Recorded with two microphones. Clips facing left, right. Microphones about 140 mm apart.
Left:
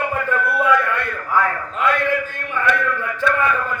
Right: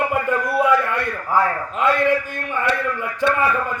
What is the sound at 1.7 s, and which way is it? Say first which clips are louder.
Speech: right 2 dB; 20° right (ahead or behind).